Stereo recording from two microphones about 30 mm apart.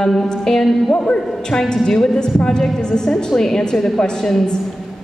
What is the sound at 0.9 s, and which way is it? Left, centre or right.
A man's voice, left.